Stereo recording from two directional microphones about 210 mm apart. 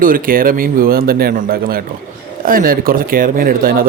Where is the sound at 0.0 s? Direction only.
40° right (ahead or behind).